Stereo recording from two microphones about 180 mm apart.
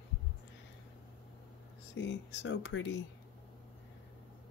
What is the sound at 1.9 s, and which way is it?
Speech, 80° left.